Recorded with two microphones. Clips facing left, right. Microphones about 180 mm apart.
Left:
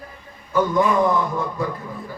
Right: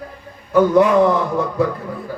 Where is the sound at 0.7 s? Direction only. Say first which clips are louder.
Right 4 dB; 90° right.